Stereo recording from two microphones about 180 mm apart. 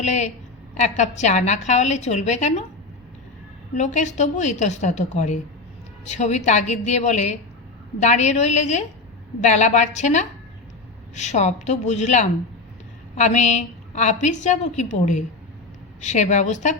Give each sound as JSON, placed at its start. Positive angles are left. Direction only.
{"t": 0.0, "sound": "a woman's voice", "side_deg": 40}
{"t": 3.8, "sound": "a woman's voice", "side_deg": 40}